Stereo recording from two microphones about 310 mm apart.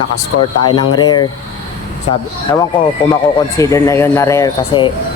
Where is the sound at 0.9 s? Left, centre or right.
Centre.